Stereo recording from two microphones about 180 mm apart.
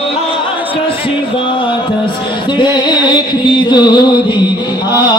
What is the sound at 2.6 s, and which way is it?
Music, 25° left (ahead or behind).